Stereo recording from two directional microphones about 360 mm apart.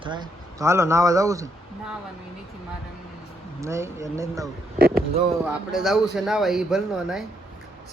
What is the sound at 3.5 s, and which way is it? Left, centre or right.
Speech, centre.